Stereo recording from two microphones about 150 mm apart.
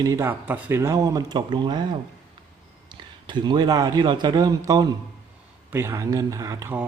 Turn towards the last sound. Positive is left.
turn(degrees=-20)  # may be behind; listen again after turning